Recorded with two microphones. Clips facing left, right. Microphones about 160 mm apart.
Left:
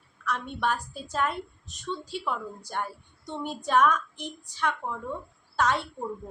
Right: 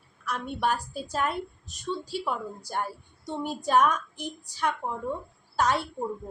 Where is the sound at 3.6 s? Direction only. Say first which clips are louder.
Even; 40° right (ahead or behind).